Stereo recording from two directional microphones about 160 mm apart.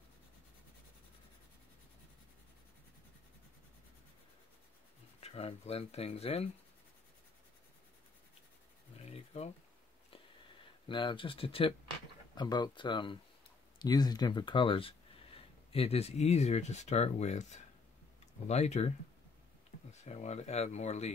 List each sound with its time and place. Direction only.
5.2 s speech: 40° left (ahead or behind)
8.9 s a sound: 40° left (ahead or behind)
10.9 s speech: 30° left (ahead or behind)
19.9 s speech: 45° left (ahead or behind)